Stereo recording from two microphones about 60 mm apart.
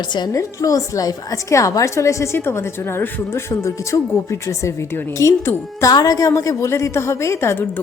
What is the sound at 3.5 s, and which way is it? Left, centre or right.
A woman's voice, left.